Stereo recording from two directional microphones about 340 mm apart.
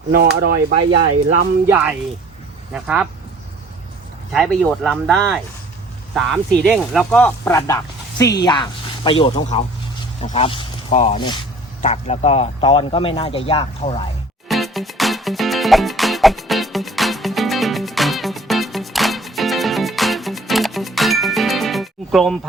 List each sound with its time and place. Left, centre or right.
0.1 s speech: right
1.6 s speech: centre
4.3 s speech: centre
6.7 s speech: centre
14.4 s music: centre